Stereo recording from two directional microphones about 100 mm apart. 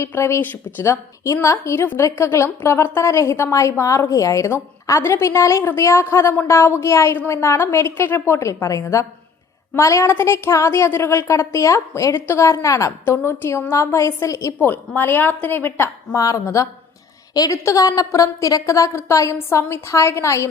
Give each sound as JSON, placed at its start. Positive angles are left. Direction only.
{"t": 0.0, "sound": "a woman's voice", "side_deg": 25}
{"t": 14.7, "sound": "a woman's voice", "side_deg": 20}
{"t": 16.1, "sound": "a woman's voice", "side_deg": 35}